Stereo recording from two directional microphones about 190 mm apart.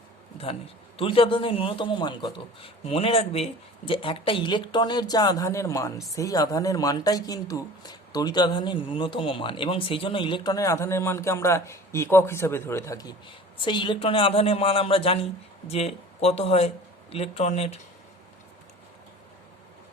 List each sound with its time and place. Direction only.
0.9 s speech: 30° left (ahead or behind)
13.7 s speech: 25° left (ahead or behind)